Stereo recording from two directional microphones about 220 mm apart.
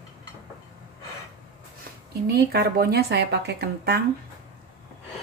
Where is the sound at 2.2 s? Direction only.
45° right (ahead or behind).